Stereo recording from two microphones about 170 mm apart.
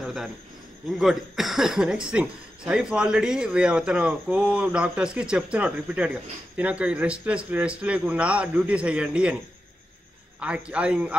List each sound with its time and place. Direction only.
0.0 s cricket: centre (ahead or behind)
0.8 s speech: centre (ahead or behind)
10.4 s speech: 5° right (ahead or behind)